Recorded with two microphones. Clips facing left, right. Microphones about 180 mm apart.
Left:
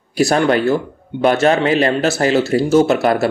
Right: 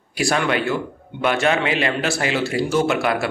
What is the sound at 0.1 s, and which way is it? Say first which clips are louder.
A man's voice: left 6 dB; 40° left (ahead or behind).